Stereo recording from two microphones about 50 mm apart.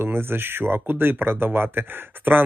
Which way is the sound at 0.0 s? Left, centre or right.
Right.